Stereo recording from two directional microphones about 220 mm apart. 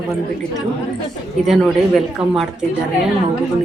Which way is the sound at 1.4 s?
Centre (ahead or behind).